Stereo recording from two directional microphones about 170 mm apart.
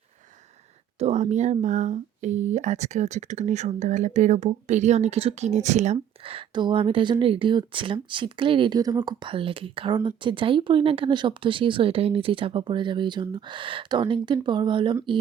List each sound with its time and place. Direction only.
0.9 s speech: 40° right (ahead or behind)